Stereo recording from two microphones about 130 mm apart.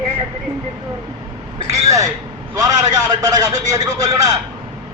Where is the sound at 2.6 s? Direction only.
30° right (ahead or behind).